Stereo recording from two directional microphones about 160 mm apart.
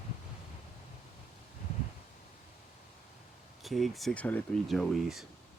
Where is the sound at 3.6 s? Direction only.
Centre (ahead or behind).